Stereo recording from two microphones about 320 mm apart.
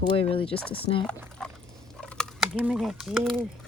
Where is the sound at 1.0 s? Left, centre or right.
Centre.